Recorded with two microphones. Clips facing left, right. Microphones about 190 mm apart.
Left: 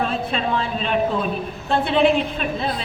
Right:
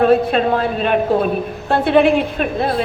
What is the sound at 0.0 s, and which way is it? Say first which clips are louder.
A woman's voice: right 10 dB; 55° right (ahead or behind).